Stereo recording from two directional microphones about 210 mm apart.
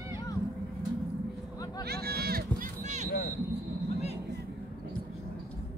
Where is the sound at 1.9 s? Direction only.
50° right (ahead or behind).